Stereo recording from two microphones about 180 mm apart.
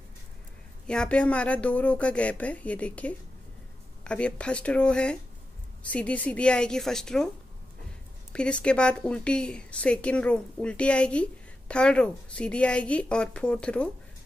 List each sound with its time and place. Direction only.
0.8 s a woman's voice: 5° left (ahead or behind)
8.3 s a woman's voice: 5° left (ahead or behind)